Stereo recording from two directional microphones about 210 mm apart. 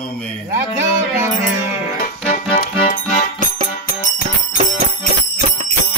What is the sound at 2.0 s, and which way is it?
Music, 45° left (ahead or behind).